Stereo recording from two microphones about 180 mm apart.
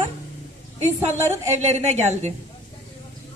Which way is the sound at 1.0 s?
40° right (ahead or behind).